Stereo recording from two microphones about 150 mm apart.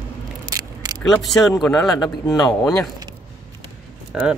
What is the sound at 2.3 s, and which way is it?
Speech, 25° left (ahead or behind).